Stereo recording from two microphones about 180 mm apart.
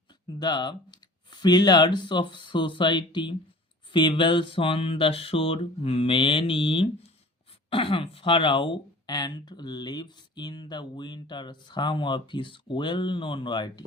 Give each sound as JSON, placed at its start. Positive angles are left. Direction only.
{"t": 0.3, "sound": "speech", "side_deg": 25}